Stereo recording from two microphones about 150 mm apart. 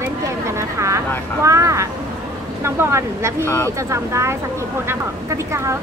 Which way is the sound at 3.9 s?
20° right (ahead or behind).